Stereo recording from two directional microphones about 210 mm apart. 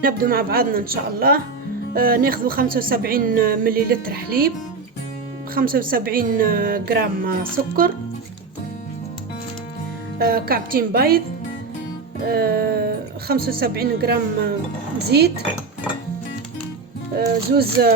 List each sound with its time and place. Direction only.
0.0 s speech: 45° right (ahead or behind)
5.5 s speech: 45° right (ahead or behind)
10.2 s speech: 45° right (ahead or behind)
12.3 s speech: 45° right (ahead or behind)
17.2 s speech: 50° right (ahead or behind)